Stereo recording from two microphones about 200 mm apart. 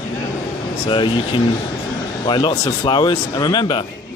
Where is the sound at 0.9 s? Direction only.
25° left (ahead or behind).